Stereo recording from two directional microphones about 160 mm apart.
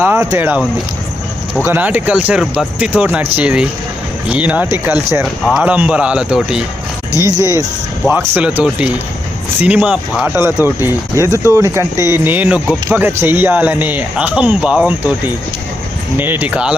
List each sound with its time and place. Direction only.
0.0 s speech: 15° right (ahead or behind)
1.6 s speech: 10° right (ahead or behind)
7.2 s speech: 20° right (ahead or behind)
8.1 s speech: 10° right (ahead or behind)
16.1 s speech: 10° right (ahead or behind)